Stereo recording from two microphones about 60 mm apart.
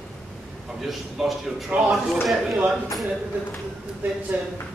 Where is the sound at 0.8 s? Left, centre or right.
Centre.